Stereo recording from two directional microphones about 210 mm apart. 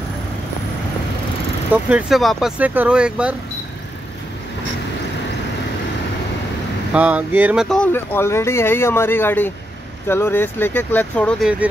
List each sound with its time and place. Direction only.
1.7 s speech: 5° right (ahead or behind)
6.9 s speech: 5° right (ahead or behind)